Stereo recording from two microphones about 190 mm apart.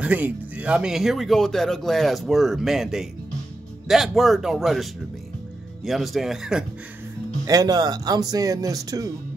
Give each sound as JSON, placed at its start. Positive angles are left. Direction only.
{"t": 0.0, "sound": "speech", "side_deg": -10}
{"t": 5.9, "sound": "speech", "side_deg": 0}
{"t": 7.4, "sound": "speech", "side_deg": -20}